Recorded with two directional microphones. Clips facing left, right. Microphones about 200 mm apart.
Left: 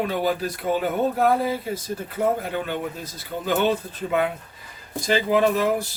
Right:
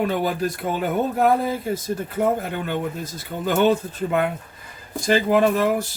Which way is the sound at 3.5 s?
50° right (ahead or behind).